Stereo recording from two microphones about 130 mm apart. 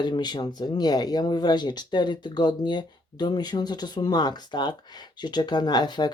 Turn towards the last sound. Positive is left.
turn(degrees=35)  # may be behind; listen again after turning